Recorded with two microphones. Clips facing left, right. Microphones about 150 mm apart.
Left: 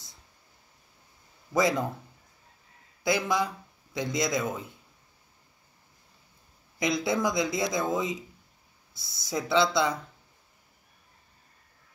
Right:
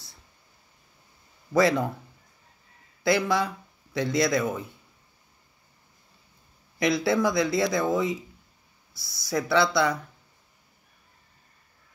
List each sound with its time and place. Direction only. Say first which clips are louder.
1.5 s speech: right 4 dB; 20° left (ahead or behind)
3.0 s speech: right 3 dB; 20° left (ahead or behind)
6.8 s speech: right 4 dB; 20° left (ahead or behind)